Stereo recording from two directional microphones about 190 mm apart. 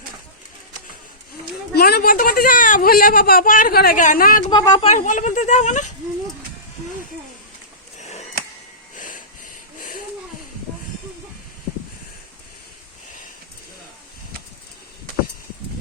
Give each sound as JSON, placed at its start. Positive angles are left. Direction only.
{"t": 1.7, "sound": "speech", "side_deg": 55}
{"t": 4.4, "sound": "speech", "side_deg": 20}
{"t": 4.9, "sound": "speech", "side_deg": 40}
{"t": 9.0, "sound": "wheeze", "side_deg": 45}